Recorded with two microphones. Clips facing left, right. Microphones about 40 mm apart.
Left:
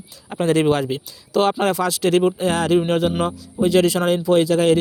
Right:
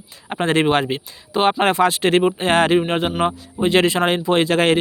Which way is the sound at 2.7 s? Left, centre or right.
Right.